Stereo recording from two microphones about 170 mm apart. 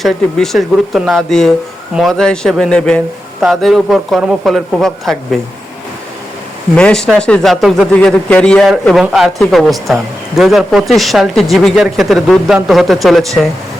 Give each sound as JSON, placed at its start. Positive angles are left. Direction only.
{"t": 0.0, "sound": "a woman's voice", "side_deg": 0}
{"t": 6.7, "sound": "a woman's voice", "side_deg": 5}